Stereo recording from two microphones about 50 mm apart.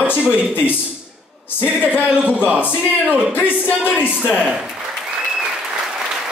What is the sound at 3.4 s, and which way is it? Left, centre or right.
Speech, left.